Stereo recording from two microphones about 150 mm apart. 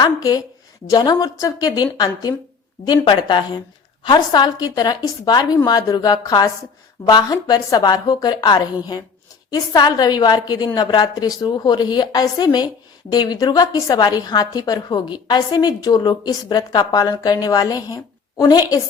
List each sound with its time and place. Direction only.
0.0 s a woman's voice: 25° left (ahead or behind)